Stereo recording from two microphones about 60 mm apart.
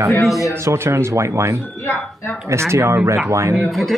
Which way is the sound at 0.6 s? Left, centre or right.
Right.